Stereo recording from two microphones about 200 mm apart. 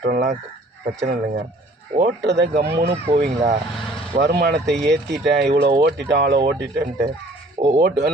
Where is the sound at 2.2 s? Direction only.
60° right (ahead or behind).